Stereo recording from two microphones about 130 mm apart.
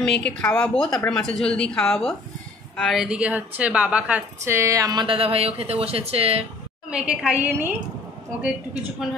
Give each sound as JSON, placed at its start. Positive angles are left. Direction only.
{"t": 0.0, "sound": "a woman's voice", "side_deg": 5}
{"t": 2.8, "sound": "a woman's voice", "side_deg": 0}
{"t": 4.6, "sound": "speech", "side_deg": -25}
{"t": 5.0, "sound": "speech", "side_deg": -45}
{"t": 6.9, "sound": "a woman's voice", "side_deg": -5}